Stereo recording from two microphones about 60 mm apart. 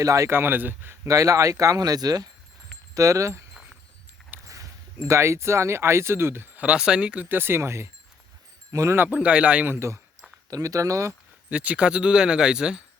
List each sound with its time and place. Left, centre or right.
0.0 s speech: right
0.3 s speech: right
1.0 s speech: right
2.9 s speech: right
4.4 s speech: right
6.6 s speech: centre
7.3 s speech: right
9.0 s speech: centre
9.6 s speech: right
10.5 s speech: right
11.4 s speech: right